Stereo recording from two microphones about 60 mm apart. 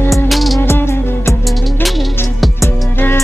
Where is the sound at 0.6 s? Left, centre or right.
Left.